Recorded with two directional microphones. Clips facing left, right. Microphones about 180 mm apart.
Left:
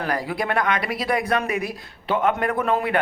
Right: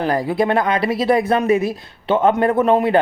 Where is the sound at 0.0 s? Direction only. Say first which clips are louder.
Right 7 dB; 25° right (ahead or behind).